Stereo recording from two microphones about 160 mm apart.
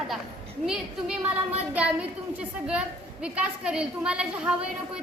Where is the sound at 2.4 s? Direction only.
5° right (ahead or behind).